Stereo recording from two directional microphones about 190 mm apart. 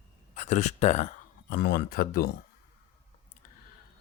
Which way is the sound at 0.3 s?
40° left (ahead or behind).